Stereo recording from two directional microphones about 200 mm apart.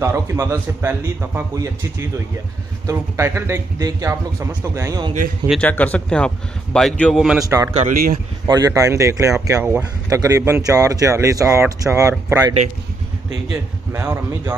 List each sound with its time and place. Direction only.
0.0 s speech: 15° right (ahead or behind)
5.5 s a man's voice: 5° left (ahead or behind)
7.4 s speech: 15° right (ahead or behind)